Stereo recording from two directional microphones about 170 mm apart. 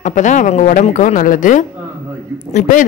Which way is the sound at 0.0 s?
45° left (ahead or behind).